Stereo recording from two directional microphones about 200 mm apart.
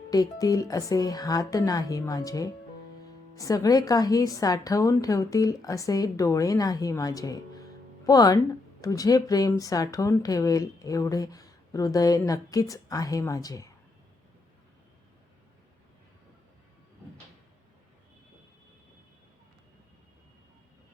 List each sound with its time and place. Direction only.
0.1 s speech: 20° left (ahead or behind)